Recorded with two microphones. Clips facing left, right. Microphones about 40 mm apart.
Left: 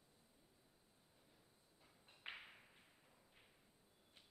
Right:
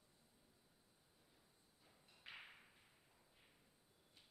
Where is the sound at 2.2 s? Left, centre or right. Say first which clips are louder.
Left 4 dB; left.